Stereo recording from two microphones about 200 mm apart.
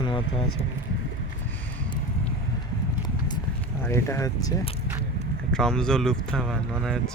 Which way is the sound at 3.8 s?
15° left (ahead or behind).